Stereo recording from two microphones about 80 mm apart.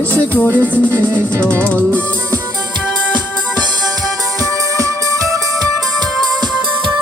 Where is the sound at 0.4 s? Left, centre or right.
Right.